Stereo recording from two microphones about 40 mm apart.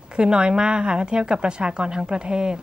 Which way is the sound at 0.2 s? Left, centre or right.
Right.